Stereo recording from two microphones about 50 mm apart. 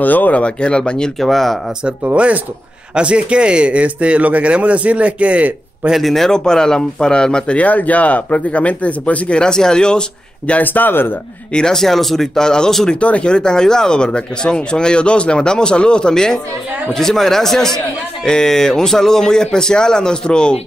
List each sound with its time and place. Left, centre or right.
0.0 s speech: left; by 1.6 s centre
2.0 s speech: right
5.9 s a man's voice: centre
7.5 s speech: left
9.4 s a man's voice: centre
10.6 s speech: left
11.5 s a man's voice: centre
13.0 s a man's voice: left